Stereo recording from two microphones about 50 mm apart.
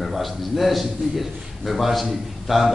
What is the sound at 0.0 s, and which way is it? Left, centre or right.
A man's voice, centre.